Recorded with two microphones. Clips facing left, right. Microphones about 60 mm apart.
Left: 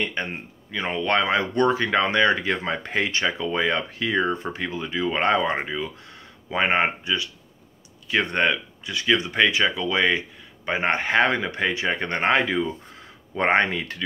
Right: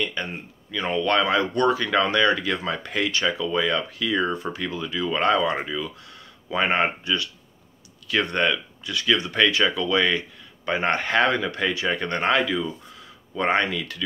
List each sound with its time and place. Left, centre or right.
0.0 s speech: left